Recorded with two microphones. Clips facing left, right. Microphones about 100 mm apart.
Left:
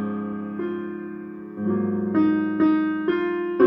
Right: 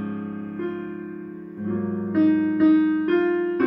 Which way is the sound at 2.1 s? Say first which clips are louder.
Right 2 dB; 40° left (ahead or behind).